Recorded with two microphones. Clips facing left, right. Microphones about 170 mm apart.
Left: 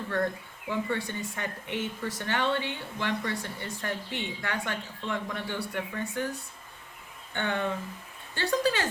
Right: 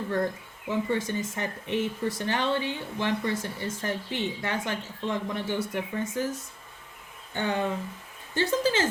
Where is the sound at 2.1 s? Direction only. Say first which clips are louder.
Left 1 dB; 25° right (ahead or behind).